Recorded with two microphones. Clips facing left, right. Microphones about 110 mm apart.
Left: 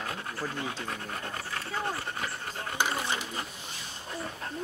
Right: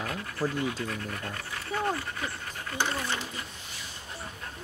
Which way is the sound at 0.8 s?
30° left (ahead or behind).